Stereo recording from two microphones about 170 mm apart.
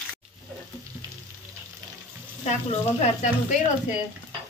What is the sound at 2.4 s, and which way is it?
Speech, 45° left (ahead or behind).